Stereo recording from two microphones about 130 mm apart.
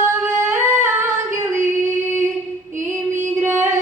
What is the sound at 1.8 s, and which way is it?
Music, 75° right (ahead or behind).